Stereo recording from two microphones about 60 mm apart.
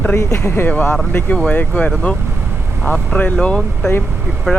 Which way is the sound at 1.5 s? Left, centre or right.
Left.